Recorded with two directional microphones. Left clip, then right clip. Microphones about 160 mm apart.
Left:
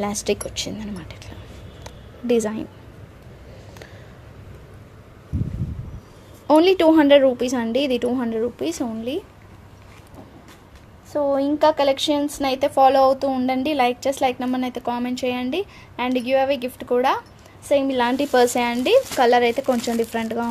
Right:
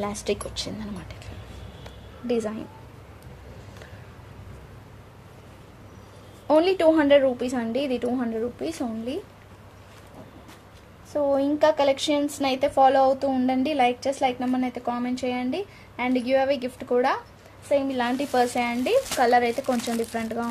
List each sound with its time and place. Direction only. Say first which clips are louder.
0.0 s speech: left 4 dB; 25° left (ahead or behind)
2.2 s a woman's voice: left 6 dB; 35° left (ahead or behind)
6.4 s a woman's voice: left 4 dB; 35° left (ahead or behind)
11.1 s speech: left 2 dB; 30° left (ahead or behind)
17.6 s speech: left 5 dB; 55° left (ahead or behind)
19.2 s a woman's voice: left 4 dB; 40° left (ahead or behind)